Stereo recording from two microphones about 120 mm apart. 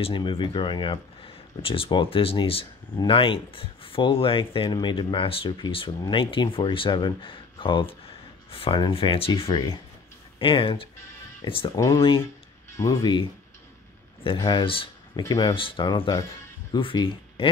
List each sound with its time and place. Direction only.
0.0 s speech: 45° left (ahead or behind)
11.7 s speech: 25° left (ahead or behind)
13.0 s speech: 40° left (ahead or behind)